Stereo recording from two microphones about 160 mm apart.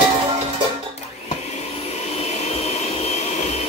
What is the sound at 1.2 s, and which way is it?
Vacuum cleaner, 45° left (ahead or behind).